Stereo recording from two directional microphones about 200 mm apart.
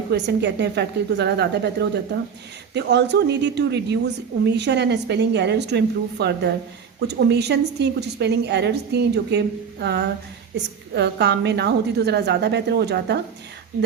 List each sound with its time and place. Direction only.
0.1 s a woman's voice: 60° right (ahead or behind)